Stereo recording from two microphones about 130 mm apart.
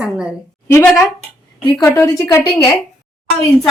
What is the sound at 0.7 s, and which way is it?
A woman's voice, 20° left (ahead or behind).